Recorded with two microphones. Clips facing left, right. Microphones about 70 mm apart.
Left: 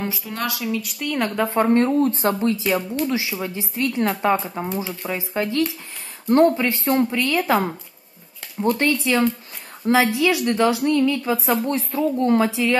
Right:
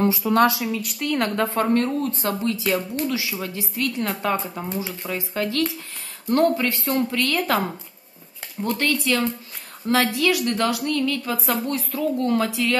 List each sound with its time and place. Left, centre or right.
0.7 s a woman's voice: centre
1.5 s speech: left
5.0 s a woman's voice: centre
8.7 s speech: left